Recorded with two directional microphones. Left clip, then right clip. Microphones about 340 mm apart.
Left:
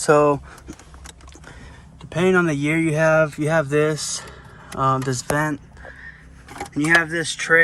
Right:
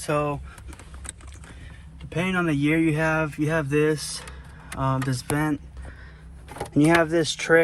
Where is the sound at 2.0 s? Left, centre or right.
Centre.